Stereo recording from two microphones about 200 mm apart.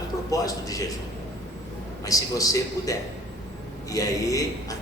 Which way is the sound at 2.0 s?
15° left (ahead or behind).